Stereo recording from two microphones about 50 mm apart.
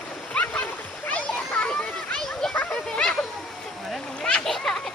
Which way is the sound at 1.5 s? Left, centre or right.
Centre.